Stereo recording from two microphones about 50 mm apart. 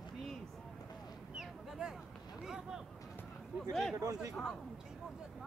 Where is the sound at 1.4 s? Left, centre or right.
Centre.